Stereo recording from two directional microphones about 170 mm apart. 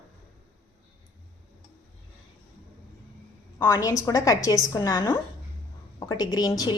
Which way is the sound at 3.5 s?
20° left (ahead or behind).